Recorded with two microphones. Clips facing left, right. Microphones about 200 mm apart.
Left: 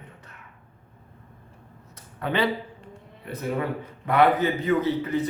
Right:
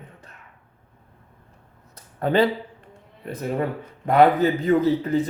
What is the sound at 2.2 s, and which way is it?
Speech, 40° right (ahead or behind).